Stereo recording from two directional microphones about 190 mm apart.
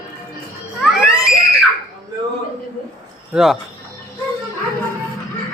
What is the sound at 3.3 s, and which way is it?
Speech, centre (ahead or behind).